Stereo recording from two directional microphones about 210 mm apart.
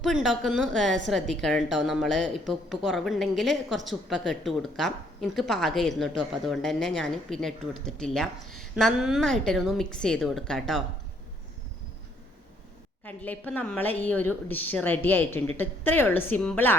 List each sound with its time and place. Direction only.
0.0 s a woman's voice: centre (ahead or behind)
13.1 s a woman's voice: 5° left (ahead or behind)